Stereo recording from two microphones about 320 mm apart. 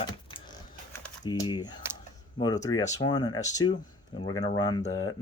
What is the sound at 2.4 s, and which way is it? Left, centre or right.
Speech, centre.